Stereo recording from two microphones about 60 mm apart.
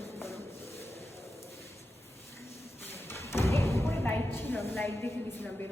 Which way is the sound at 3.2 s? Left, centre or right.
Left.